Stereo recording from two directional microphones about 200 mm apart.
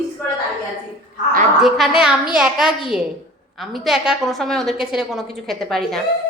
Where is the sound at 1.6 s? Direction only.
Centre (ahead or behind).